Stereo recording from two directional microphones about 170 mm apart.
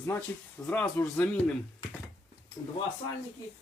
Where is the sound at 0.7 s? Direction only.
10° left (ahead or behind).